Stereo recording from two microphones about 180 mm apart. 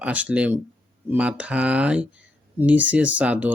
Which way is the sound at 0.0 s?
10° right (ahead or behind).